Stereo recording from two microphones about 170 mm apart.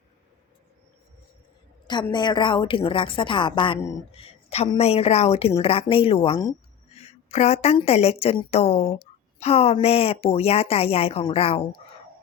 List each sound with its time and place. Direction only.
2.1 s a woman's voice: 25° left (ahead or behind)
3.8 s speech: 15° left (ahead or behind)
4.2 s a sound: 40° left (ahead or behind)
4.8 s a woman's voice: 35° left (ahead or behind)